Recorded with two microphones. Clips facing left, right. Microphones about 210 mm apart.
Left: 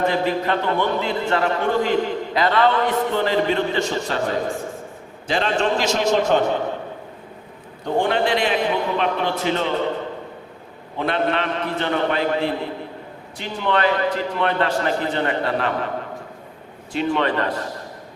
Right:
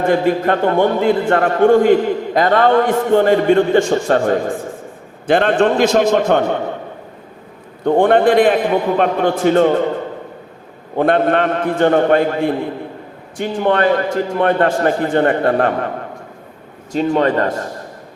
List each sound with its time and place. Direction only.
0.0 s a man's voice: 50° right (ahead or behind)
7.9 s a man's voice: 55° right (ahead or behind)
10.9 s a man's voice: 50° right (ahead or behind)
16.9 s a man's voice: 40° right (ahead or behind)